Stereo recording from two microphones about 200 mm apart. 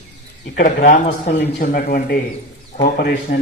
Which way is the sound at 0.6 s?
45° left (ahead or behind).